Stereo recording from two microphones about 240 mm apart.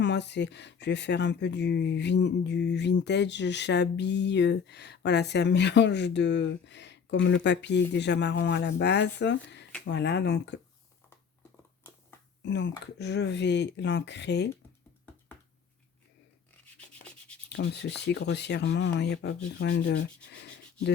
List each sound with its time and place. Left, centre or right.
0.0 s speech: left
12.4 s speech: left
17.6 s speech: left